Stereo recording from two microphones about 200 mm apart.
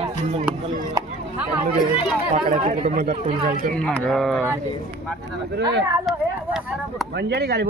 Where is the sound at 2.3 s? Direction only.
35° right (ahead or behind).